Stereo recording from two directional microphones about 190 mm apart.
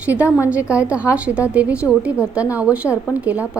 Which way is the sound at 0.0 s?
10° right (ahead or behind).